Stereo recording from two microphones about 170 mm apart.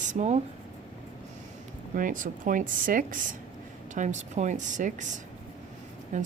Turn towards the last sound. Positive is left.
turn(degrees=-45)  # may be behind; listen again after turning